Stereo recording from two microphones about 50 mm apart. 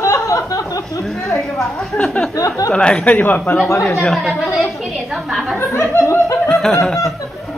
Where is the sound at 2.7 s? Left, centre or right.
Centre.